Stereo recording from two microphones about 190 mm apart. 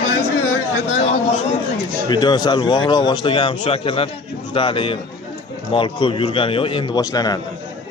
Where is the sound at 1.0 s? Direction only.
35° left (ahead or behind).